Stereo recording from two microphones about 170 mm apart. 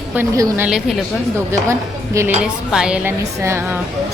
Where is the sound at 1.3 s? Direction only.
15° right (ahead or behind).